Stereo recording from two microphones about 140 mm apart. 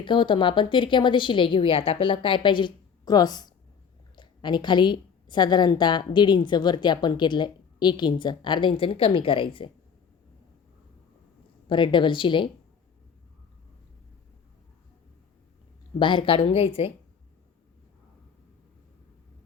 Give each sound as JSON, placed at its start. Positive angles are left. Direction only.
{"t": 0.0, "sound": "a woman's voice", "side_deg": 35}
{"t": 11.7, "sound": "a woman's voice", "side_deg": 35}
{"t": 16.0, "sound": "a woman's voice", "side_deg": 35}